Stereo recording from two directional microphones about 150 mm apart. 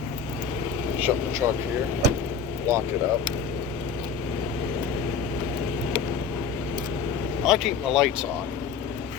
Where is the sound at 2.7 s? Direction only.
20° right (ahead or behind).